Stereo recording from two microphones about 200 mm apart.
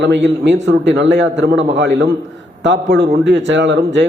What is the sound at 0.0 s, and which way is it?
A man's voice, 60° right (ahead or behind).